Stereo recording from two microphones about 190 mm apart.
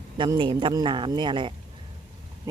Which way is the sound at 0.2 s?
25° right (ahead or behind).